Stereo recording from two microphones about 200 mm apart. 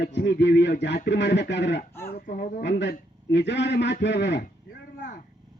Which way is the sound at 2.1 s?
50° left (ahead or behind).